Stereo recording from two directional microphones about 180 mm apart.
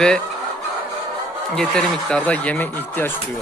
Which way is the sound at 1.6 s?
5° left (ahead or behind).